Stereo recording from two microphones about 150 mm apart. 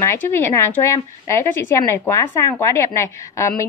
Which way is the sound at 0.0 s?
15° left (ahead or behind).